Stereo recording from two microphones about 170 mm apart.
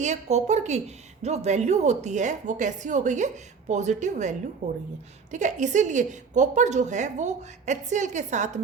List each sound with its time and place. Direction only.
0.0 s a woman's voice: 40° right (ahead or behind)